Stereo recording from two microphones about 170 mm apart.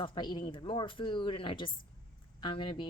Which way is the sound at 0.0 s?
25° left (ahead or behind).